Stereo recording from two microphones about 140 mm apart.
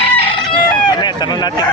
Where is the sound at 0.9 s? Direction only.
30° left (ahead or behind).